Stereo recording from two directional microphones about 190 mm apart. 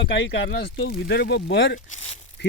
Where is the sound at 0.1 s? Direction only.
70° left (ahead or behind).